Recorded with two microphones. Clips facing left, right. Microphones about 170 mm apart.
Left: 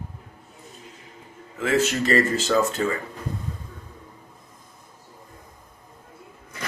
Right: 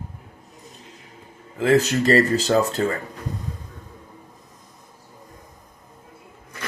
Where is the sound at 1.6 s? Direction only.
35° right (ahead or behind).